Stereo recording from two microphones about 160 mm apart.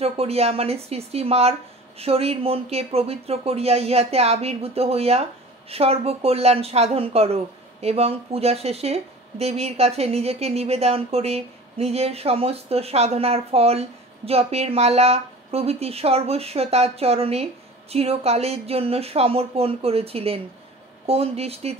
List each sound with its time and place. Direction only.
0.0 s a woman's voice: 40° right (ahead or behind)